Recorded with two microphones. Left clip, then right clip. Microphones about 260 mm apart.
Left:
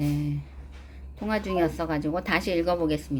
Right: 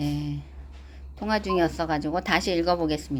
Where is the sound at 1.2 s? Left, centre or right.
Right.